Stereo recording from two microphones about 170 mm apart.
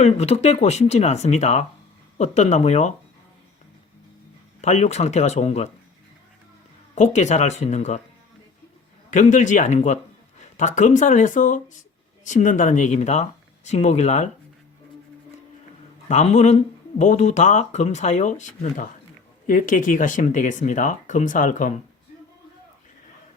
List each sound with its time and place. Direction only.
0.0 s speech: 40° left (ahead or behind)
4.6 s speech: 40° left (ahead or behind)
6.9 s speech: 45° left (ahead or behind)
9.0 s speech: 45° left (ahead or behind)
16.0 s speech: 45° left (ahead or behind)